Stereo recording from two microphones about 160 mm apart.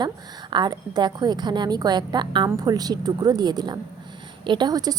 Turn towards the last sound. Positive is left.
turn(degrees=-25)  # may be behind; listen again after turning